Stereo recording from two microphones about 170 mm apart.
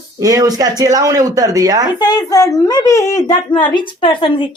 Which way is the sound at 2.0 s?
25° left (ahead or behind).